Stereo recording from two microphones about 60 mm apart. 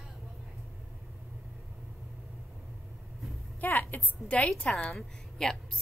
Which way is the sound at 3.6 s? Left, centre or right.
Left.